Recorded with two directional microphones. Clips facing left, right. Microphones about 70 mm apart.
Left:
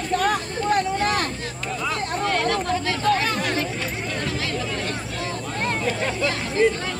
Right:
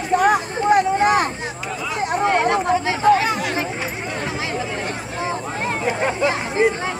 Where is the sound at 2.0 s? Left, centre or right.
Centre.